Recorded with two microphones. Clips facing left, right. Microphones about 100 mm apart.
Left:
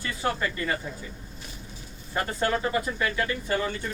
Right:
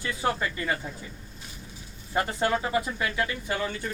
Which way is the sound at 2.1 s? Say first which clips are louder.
Right 1 dB; 15° right (ahead or behind).